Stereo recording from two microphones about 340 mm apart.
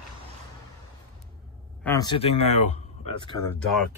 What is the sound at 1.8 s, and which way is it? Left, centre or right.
A man's voice, centre.